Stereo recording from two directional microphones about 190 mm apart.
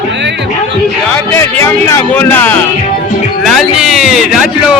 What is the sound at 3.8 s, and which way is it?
Speech, centre (ahead or behind).